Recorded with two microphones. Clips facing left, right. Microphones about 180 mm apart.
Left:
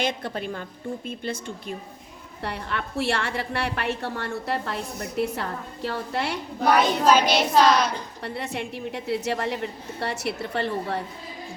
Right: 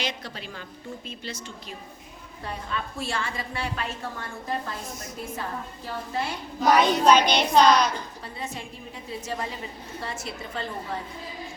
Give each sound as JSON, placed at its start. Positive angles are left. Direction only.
{"t": 0.0, "sound": "speech", "side_deg": 55}
{"t": 2.4, "sound": "a woman's voice", "side_deg": 70}
{"t": 7.0, "sound": "child singing", "side_deg": 5}
{"t": 8.2, "sound": "a woman's voice", "side_deg": 70}